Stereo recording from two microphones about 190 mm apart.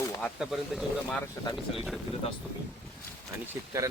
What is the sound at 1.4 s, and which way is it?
Speech, 20° left (ahead or behind).